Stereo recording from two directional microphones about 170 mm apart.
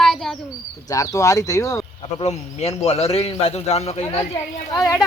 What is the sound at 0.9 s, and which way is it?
Speech, 20° left (ahead or behind).